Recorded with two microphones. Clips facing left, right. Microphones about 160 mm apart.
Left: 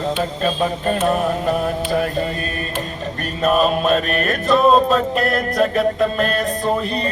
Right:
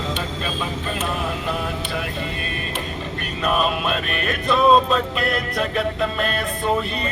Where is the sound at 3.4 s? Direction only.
40° left (ahead or behind).